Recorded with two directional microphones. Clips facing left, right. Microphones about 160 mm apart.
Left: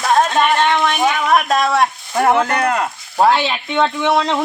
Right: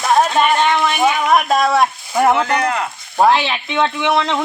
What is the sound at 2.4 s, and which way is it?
Speech, 50° left (ahead or behind).